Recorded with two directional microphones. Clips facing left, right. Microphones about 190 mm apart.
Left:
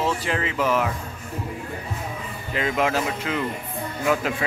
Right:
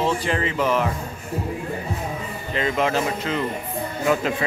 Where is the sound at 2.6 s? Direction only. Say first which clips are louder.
Right 1 dB; 5° left (ahead or behind).